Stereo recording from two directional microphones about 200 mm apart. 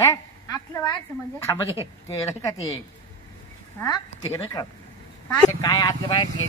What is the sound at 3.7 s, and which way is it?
A woman's voice, 15° left (ahead or behind).